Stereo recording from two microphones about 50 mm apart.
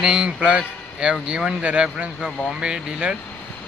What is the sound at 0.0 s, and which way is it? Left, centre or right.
A man's voice, right.